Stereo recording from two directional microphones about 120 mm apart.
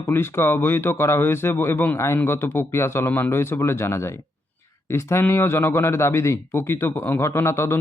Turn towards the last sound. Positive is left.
turn(degrees=20)  # may be behind; listen again after turning